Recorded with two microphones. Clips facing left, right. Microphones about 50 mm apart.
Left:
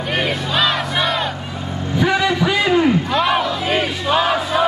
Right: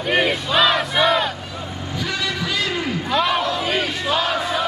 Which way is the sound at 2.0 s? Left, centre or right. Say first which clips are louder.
Left 9 dB; left.